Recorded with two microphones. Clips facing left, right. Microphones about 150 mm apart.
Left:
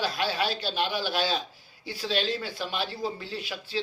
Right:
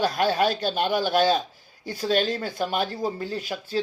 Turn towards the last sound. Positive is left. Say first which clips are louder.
# right 5 dB
turn(degrees=-45)  # may be behind; listen again after turning